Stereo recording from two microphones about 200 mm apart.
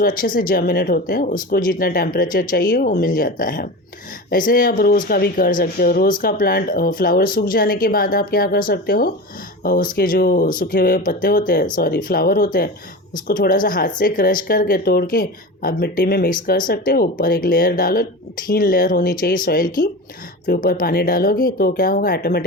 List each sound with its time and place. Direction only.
0.0 s speech: 45° left (ahead or behind)